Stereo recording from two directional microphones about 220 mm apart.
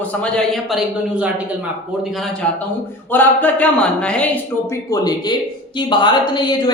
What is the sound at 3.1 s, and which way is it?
Speech, 10° left (ahead or behind).